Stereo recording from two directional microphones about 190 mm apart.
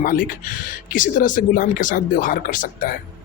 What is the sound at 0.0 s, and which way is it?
Speech, 50° left (ahead or behind).